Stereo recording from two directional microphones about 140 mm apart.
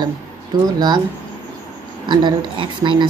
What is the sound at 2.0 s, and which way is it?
Speech, 30° right (ahead or behind).